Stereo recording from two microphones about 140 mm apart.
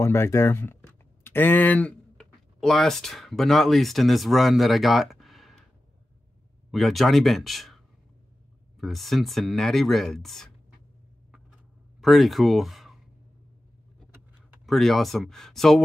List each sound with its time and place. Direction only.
0.0 s speech: 20° left (ahead or behind); by 5.6 s centre (ahead or behind)
6.7 s speech: centre (ahead or behind)
12.0 s speech: centre (ahead or behind)
14.7 s speech: centre (ahead or behind)